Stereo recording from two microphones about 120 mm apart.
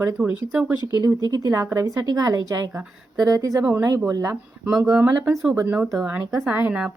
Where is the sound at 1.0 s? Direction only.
30° right (ahead or behind).